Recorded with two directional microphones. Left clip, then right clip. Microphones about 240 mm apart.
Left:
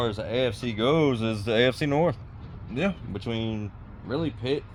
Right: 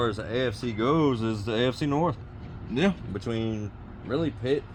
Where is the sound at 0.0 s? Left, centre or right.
Left.